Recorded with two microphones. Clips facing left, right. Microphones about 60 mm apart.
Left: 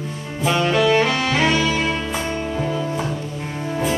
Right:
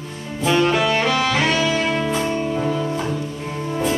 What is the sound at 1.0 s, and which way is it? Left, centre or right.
Music, centre.